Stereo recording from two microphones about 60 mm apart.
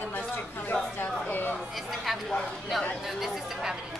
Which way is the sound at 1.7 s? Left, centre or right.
Centre.